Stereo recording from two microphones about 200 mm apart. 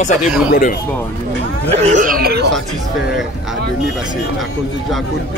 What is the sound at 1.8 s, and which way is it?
Speech, 40° right (ahead or behind).